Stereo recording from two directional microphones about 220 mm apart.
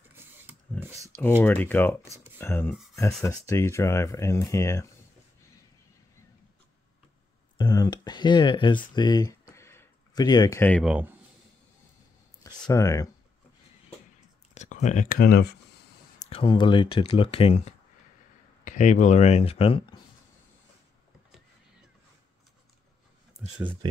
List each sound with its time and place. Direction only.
0.1 s a sound: 10° right (ahead or behind)
1.4 s speech: 10° left (ahead or behind)
7.5 s speech: 15° left (ahead or behind)
8.9 s a sound: 20° left (ahead or behind)
10.8 s speech: 5° right (ahead or behind)
12.6 s speech: 15° left (ahead or behind)
14.5 s speech: 30° left (ahead or behind)
16.2 s speech: 25° left (ahead or behind)